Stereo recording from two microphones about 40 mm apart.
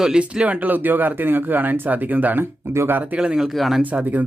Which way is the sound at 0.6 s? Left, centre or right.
Right.